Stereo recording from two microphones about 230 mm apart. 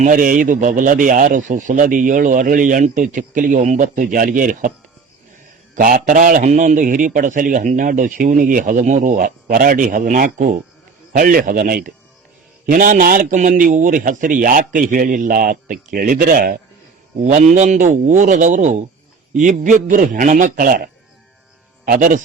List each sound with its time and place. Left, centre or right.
0.0 s a man's voice: right
5.7 s a man's voice: right